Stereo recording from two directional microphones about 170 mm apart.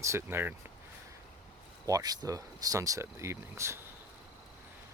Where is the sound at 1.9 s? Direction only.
20° right (ahead or behind).